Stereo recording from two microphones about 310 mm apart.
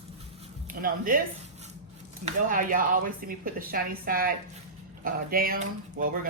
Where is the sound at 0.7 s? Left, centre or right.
Right.